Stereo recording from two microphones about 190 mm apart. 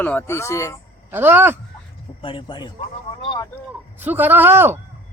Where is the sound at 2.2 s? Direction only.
25° left (ahead or behind).